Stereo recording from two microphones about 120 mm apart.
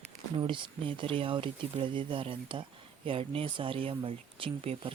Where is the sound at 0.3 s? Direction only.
45° right (ahead or behind).